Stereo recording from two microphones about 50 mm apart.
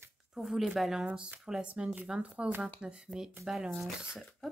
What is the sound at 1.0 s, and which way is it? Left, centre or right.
Speech, centre.